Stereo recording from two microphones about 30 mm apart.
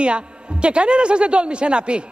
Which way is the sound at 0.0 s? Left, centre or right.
Right.